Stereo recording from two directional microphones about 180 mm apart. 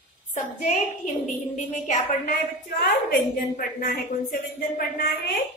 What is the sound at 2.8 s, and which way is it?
A woman's voice, 55° left (ahead or behind).